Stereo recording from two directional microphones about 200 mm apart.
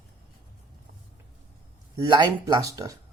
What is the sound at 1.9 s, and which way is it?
Speech, 20° right (ahead or behind).